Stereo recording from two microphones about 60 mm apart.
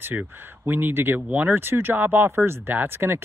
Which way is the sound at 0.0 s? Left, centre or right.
Right.